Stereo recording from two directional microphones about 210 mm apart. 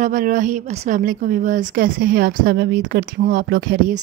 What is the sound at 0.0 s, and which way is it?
A woman's voice, 40° right (ahead or behind).